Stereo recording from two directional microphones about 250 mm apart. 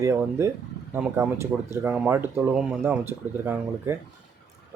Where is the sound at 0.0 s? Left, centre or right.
Centre.